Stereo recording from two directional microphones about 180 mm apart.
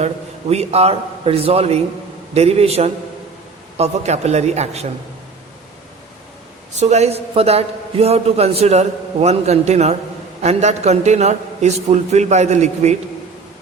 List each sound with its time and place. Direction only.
0.0 s a man's voice: 35° right (ahead or behind)
6.7 s a man's voice: 40° right (ahead or behind)